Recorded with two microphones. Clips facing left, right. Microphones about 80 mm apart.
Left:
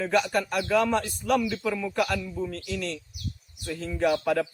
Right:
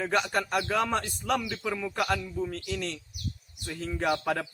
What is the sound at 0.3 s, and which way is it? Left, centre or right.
A man's voice, right.